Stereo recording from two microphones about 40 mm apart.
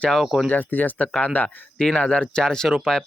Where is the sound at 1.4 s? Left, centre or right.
Left.